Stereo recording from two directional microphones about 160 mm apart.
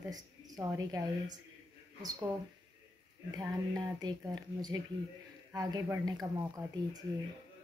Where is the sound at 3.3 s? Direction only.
25° right (ahead or behind).